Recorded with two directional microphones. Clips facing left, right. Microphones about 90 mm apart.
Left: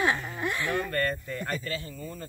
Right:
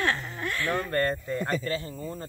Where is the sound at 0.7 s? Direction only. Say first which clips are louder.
Right 2 dB; 25° right (ahead or behind).